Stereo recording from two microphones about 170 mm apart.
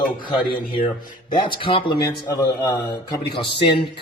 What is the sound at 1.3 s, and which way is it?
A man's voice, 30° left (ahead or behind).